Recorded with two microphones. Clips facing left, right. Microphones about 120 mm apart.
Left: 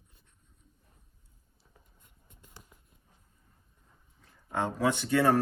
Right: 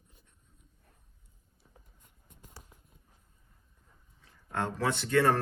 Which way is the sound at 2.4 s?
40° right (ahead or behind).